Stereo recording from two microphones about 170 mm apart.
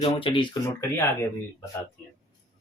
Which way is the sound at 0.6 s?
15° left (ahead or behind).